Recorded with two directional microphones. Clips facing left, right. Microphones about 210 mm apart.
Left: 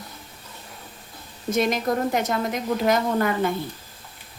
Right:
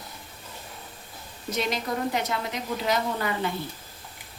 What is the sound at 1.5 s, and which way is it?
A woman's voice, 50° left (ahead or behind).